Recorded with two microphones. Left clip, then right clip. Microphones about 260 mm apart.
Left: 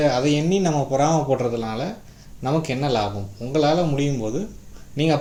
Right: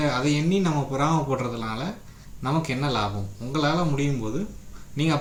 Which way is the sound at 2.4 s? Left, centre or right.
Right.